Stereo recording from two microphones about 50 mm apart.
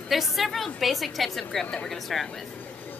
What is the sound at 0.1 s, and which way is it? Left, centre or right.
A woman's voice, centre.